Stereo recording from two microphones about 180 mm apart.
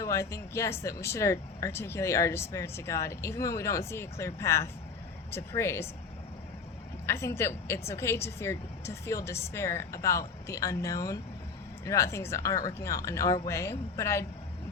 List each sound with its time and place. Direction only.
0.0 s speech: 15° left (ahead or behind)
7.1 s speech: 15° left (ahead or behind)